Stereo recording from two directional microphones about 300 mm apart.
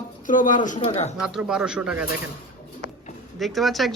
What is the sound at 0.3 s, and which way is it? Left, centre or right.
Speech, left.